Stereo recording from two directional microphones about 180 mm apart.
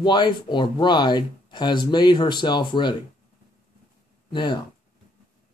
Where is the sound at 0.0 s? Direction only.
25° left (ahead or behind).